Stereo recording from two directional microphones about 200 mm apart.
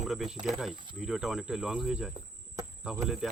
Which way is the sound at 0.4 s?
Centre (ahead or behind).